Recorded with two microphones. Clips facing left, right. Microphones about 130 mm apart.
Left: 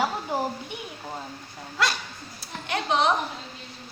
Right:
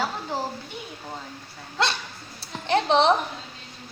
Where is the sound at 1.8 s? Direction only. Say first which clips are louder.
Right 1 dB; 25° right (ahead or behind).